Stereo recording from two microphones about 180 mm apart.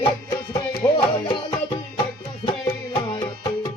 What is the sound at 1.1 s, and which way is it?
Music, 25° left (ahead or behind).